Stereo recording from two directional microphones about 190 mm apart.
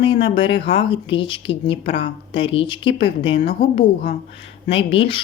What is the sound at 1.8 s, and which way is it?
Speech, 70° left (ahead or behind).